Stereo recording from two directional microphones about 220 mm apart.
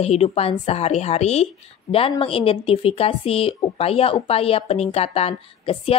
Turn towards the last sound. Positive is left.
turn(degrees=25)  # may be behind; listen again after turning